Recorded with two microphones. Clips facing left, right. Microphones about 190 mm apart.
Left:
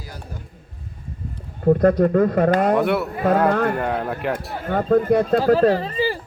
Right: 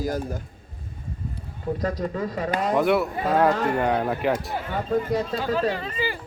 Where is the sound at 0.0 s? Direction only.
45° right (ahead or behind).